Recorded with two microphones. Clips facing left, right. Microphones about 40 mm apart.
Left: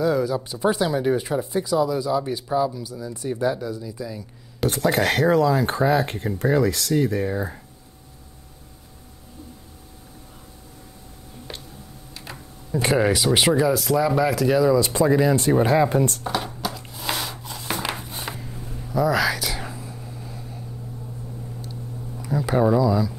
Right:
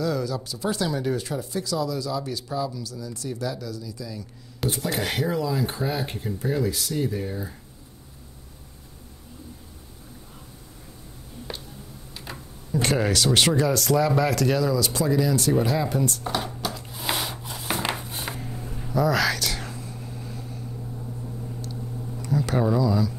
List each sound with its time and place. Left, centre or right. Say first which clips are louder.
0.0 s speech: left 5 dB; centre
4.6 s speech: left 4 dB; centre
4.9 s speech: left 9 dB; left
12.8 s speech: left 3 dB; centre
14.7 s speech: left 5 dB; left
16.3 s a sound: left 2 dB; centre
16.9 s wood: right 1 dB; centre
17.3 s rub: even; centre
18.2 s a sound: even; centre
18.9 s whispering: left 2 dB; centre
21.5 s a sound: right 1 dB; centre